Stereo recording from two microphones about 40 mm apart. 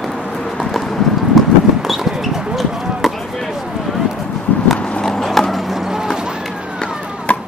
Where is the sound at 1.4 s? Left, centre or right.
Centre.